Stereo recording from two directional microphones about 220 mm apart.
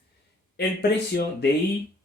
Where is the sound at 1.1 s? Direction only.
45° left (ahead or behind).